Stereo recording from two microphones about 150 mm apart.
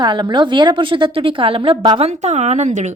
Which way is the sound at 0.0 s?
30° right (ahead or behind).